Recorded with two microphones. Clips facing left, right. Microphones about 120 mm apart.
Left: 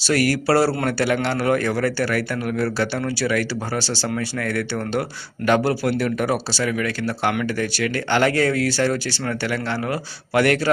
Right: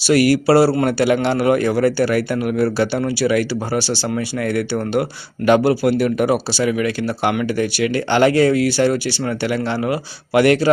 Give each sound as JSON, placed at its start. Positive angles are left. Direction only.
{"t": 0.1, "sound": "speech", "side_deg": -15}